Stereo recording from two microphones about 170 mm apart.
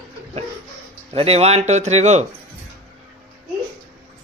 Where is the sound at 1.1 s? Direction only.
35° right (ahead or behind).